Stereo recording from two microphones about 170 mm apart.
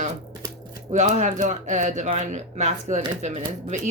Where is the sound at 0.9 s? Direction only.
45° right (ahead or behind).